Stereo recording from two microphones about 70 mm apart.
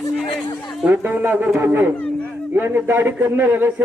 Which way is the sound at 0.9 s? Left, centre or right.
Right.